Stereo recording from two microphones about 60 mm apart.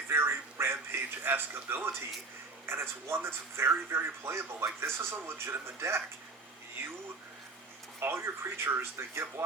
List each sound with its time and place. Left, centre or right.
0.1 s a man's voice: right
7.9 s speech: right